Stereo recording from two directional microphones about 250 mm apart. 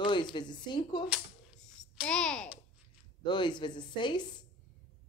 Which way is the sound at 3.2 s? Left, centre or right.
Centre.